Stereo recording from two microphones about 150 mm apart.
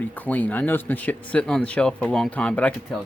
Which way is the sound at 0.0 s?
10° left (ahead or behind).